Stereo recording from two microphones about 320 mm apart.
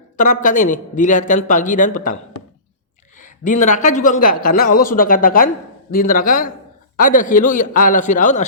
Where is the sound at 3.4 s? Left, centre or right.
Left.